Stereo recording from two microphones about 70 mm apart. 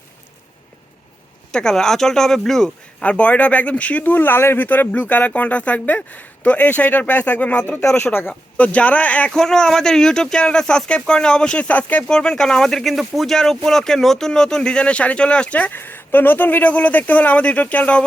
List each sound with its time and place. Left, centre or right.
1.5 s speech: centre
3.0 s speech: centre
9.3 s speech: centre